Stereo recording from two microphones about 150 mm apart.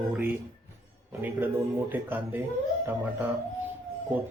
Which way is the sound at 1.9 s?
10° right (ahead or behind).